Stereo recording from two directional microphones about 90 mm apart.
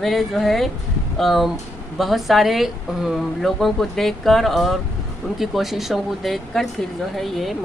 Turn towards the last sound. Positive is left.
turn(degrees=0)  # may be behind; listen again after turning